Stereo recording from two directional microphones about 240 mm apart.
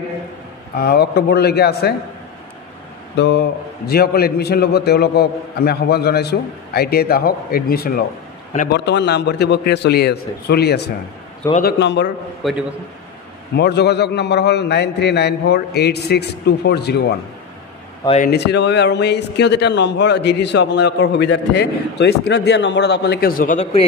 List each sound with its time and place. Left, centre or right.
0.7 s a man's voice: left
3.2 s a man's voice: left
12.4 s a man's voice: centre
13.6 s speech: left
18.0 s speech: left
18.3 s speech: left